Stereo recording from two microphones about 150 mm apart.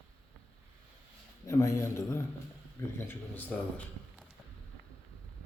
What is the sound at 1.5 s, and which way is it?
A man's voice, 20° left (ahead or behind).